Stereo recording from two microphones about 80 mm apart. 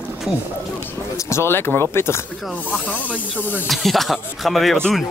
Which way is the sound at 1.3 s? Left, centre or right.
Left.